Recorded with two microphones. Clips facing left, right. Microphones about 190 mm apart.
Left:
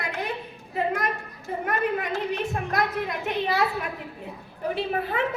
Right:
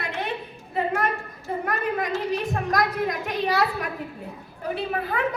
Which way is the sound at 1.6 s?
35° right (ahead or behind).